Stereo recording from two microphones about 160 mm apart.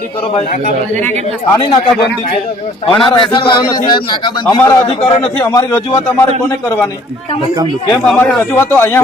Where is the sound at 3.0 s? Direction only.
30° left (ahead or behind).